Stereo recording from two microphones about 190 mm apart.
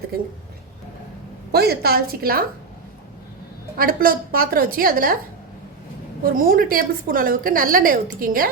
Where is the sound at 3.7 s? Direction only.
50° right (ahead or behind).